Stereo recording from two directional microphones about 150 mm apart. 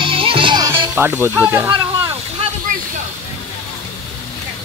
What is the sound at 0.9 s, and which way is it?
Speech, 15° right (ahead or behind).